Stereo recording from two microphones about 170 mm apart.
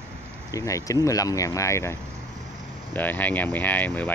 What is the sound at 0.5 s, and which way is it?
Speech, 20° left (ahead or behind).